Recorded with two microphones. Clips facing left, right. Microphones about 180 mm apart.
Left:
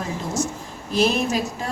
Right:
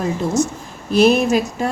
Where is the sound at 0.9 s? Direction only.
70° right (ahead or behind).